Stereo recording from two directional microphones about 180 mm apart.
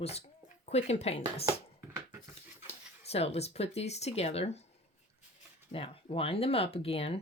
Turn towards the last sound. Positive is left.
turn(degrees=35)  # may be behind; listen again after turning